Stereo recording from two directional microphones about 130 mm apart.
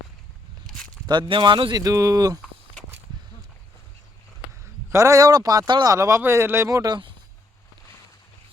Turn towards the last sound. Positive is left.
turn(degrees=-35)  # may be behind; listen again after turning